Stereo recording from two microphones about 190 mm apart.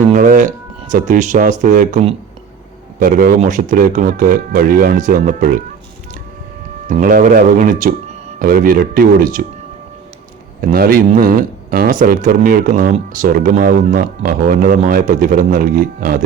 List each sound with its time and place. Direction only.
0.1 s a sound: 45° right (ahead or behind)
0.8 s speech: 40° right (ahead or behind)
6.8 s speech: 45° right (ahead or behind)
10.6 s speech: 50° right (ahead or behind)